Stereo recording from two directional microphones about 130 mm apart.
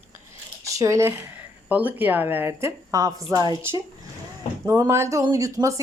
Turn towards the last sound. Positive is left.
turn(degrees=-25)  # may be behind; listen again after turning